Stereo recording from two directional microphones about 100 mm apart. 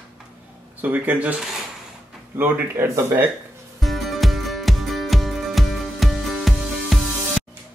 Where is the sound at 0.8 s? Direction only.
15° right (ahead or behind).